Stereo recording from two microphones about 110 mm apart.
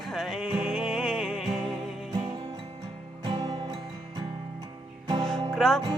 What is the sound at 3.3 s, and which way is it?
Music, 40° right (ahead or behind).